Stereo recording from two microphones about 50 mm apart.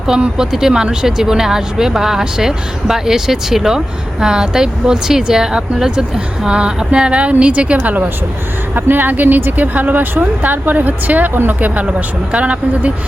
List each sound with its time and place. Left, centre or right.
0.1 s a woman's voice: centre